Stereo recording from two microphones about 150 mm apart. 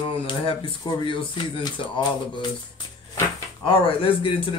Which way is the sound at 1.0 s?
35° left (ahead or behind).